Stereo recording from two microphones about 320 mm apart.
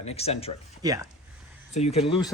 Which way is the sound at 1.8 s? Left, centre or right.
Centre.